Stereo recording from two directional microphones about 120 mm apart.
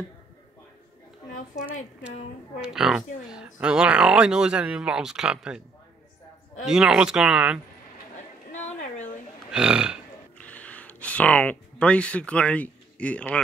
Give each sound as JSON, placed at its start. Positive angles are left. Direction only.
{"t": 2.6, "sound": "speech", "side_deg": -5}
{"t": 6.6, "sound": "speech", "side_deg": -5}
{"t": 8.5, "sound": "a sound", "side_deg": 80}
{"t": 9.5, "sound": "speech", "side_deg": -5}
{"t": 10.3, "sound": "speech", "side_deg": 10}